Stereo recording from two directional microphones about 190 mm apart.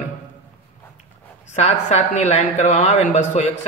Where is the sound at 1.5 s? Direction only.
35° left (ahead or behind).